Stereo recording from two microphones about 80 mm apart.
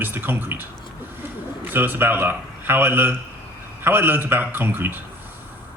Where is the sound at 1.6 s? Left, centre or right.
Right.